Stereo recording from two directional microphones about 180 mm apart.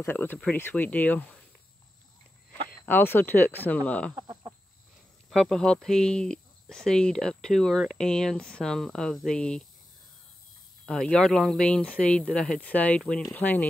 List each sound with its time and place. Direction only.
0.0 s speech: 10° left (ahead or behind)
2.7 s speech: 10° left (ahead or behind)
4.1 s chicken: 20° right (ahead or behind)
5.3 s speech: 5° left (ahead or behind)
10.9 s speech: 5° left (ahead or behind)